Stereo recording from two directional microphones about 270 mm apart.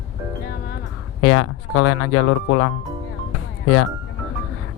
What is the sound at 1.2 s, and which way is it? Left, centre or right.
Speech, left.